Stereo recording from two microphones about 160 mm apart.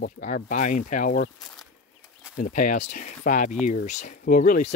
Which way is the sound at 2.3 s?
55° left (ahead or behind).